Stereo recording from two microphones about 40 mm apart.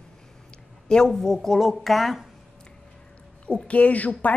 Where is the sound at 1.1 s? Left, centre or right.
Centre.